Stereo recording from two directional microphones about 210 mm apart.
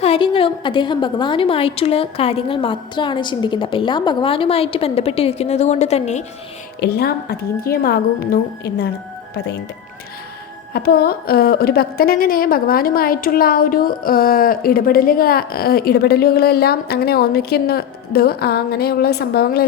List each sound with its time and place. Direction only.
0.0 s a woman's voice: 25° left (ahead or behind)
6.7 s a woman's voice: 50° left (ahead or behind)
10.8 s a woman's voice: 45° left (ahead or behind)